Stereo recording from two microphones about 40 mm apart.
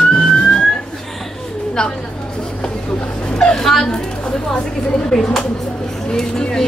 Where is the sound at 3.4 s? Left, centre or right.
Centre.